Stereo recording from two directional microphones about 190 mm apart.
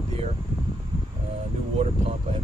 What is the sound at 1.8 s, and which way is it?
Speech, 35° right (ahead or behind).